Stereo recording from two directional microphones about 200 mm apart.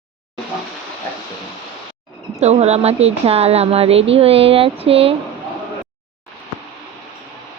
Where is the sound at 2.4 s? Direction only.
35° right (ahead or behind).